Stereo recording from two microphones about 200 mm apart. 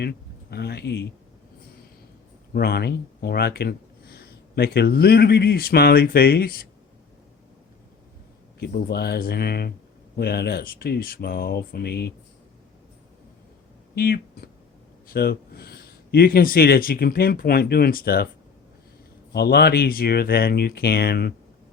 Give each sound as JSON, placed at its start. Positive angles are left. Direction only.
{"t": 0.0, "sound": "speech", "side_deg": 55}
{"t": 2.5, "sound": "speech", "side_deg": 50}
{"t": 8.5, "sound": "speech", "side_deg": 55}
{"t": 13.9, "sound": "speech", "side_deg": 50}
{"t": 19.3, "sound": "speech", "side_deg": 55}